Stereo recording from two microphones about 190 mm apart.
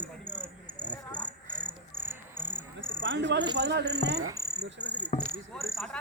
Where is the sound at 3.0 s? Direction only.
70° right (ahead or behind).